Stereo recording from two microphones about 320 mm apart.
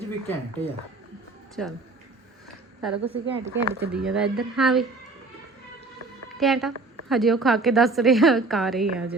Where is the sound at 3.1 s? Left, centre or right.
Centre.